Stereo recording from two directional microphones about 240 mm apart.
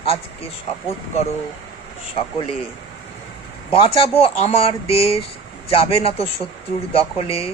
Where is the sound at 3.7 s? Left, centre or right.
Left.